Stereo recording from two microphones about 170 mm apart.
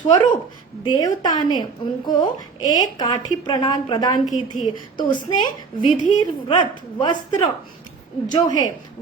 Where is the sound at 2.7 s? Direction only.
25° left (ahead or behind).